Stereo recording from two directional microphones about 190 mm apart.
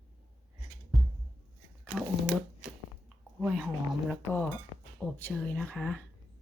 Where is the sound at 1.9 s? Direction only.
Centre (ahead or behind).